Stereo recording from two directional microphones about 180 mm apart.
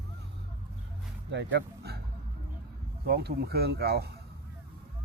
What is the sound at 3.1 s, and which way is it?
Speech, 60° right (ahead or behind).